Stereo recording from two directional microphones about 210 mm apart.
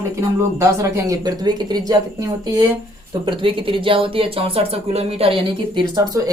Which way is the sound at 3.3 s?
25° right (ahead or behind).